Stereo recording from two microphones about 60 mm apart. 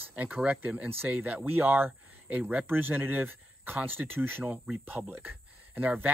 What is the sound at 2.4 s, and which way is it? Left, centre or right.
Speech, right.